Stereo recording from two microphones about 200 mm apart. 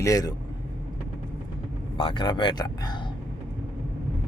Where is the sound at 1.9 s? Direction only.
25° left (ahead or behind).